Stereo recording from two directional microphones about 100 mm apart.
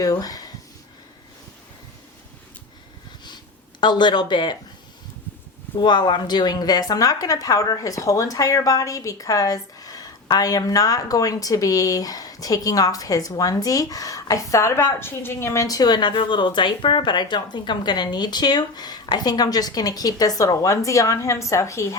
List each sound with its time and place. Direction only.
0.0 s a woman's voice: 40° left (ahead or behind)
3.2 s a sound: 45° left (ahead or behind)
5.8 s a woman's voice: 50° left (ahead or behind); by 15.6 s 25° left (ahead or behind)
15.6 s speech: 40° left (ahead or behind)